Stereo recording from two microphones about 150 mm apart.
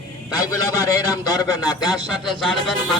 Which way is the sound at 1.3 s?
25° left (ahead or behind).